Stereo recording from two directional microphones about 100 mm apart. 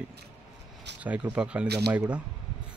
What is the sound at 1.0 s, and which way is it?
Speech, 15° right (ahead or behind).